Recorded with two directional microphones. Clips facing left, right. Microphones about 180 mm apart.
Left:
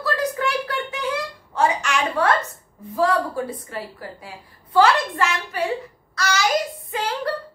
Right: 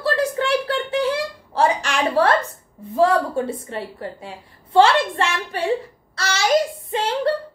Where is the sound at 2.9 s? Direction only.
25° right (ahead or behind).